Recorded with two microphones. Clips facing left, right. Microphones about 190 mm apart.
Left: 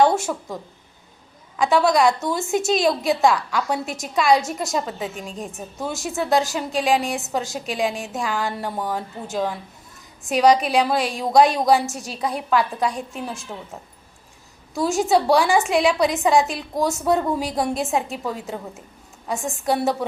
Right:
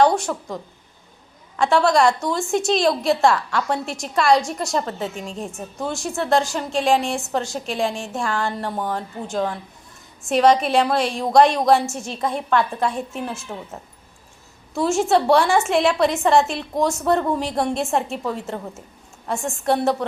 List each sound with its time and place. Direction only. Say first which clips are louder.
0.2 s a woman's voice: right 1 dB; 5° left (ahead or behind)
14.8 s a woman's voice: right 1 dB; centre (ahead or behind)